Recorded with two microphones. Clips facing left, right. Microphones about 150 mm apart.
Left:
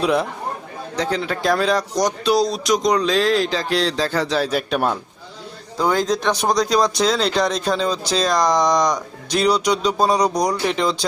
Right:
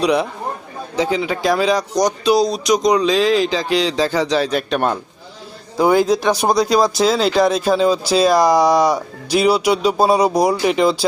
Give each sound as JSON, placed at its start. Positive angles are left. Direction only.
{"t": 0.0, "sound": "speech", "side_deg": 0}
{"t": 5.7, "sound": "speech", "side_deg": -10}